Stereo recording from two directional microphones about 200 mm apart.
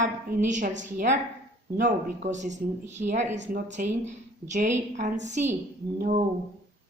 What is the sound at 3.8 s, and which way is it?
A woman's voice, 40° right (ahead or behind).